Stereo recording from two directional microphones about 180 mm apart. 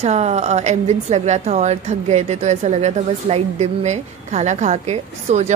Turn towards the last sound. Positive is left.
turn(degrees=-40)  # may be behind; listen again after turning